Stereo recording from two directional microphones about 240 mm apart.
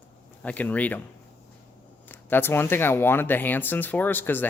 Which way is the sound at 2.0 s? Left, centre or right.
Centre.